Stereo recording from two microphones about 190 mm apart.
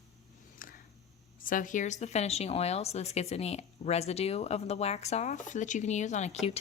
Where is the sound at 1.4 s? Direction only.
45° left (ahead or behind).